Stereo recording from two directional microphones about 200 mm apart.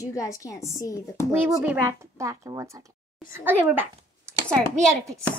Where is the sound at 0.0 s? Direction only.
15° left (ahead or behind).